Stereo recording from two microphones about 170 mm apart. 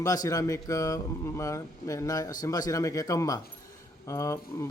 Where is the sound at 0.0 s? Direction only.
20° left (ahead or behind).